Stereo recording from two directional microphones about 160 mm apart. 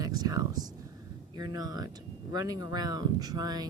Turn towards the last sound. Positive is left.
turn(degrees=-25)  # may be behind; listen again after turning